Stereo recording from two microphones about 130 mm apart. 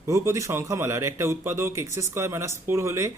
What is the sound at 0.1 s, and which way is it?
Speech, 25° right (ahead or behind).